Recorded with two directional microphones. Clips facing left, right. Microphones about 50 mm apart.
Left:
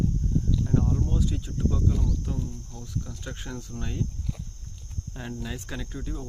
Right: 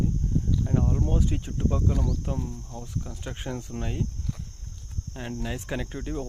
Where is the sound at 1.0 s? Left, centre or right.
Right.